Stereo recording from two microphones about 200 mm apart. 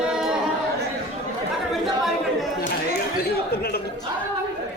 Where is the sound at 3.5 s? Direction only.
50° left (ahead or behind).